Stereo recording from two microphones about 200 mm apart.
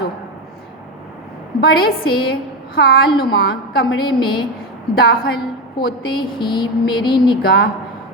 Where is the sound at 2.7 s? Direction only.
50° left (ahead or behind).